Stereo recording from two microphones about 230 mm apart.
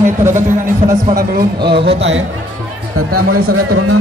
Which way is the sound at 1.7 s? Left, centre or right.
Right.